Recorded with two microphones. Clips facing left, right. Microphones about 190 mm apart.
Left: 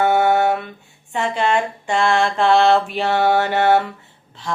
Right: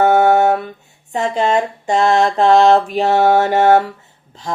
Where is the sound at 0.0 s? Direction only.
40° right (ahead or behind).